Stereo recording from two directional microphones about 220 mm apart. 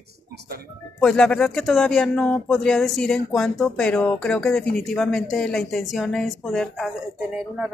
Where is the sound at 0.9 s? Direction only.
5° left (ahead or behind).